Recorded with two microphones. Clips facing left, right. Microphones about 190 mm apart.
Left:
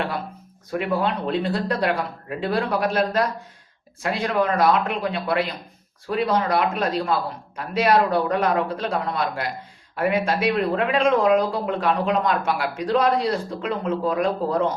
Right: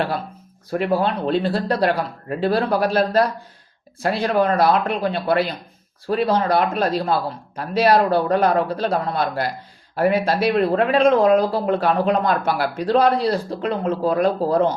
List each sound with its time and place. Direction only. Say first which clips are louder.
0.7 s speech: right 3 dB; 30° right (ahead or behind)